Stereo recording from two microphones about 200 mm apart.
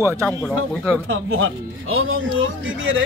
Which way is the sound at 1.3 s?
90° right.